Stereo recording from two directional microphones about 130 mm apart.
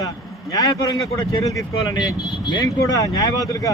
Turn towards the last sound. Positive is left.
turn(degrees=25)  # may be behind; listen again after turning